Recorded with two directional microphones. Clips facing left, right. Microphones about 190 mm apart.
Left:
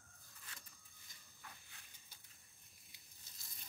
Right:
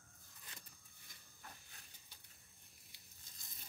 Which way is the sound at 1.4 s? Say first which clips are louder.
Right 1 dB; 40° right (ahead or behind).